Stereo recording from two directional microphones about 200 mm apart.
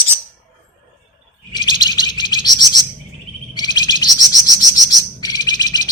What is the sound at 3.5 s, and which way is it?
Chirp, 20° left (ahead or behind).